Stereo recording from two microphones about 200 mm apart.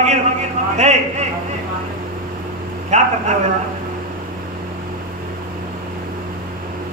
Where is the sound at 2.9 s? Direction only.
35° right (ahead or behind).